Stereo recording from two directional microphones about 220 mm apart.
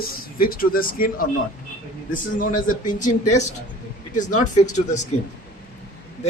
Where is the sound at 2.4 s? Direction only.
35° left (ahead or behind).